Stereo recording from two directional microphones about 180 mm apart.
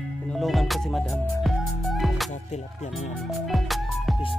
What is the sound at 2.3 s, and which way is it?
Music, 40° left (ahead or behind).